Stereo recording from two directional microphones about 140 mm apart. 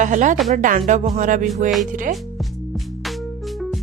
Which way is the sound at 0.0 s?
60° right (ahead or behind).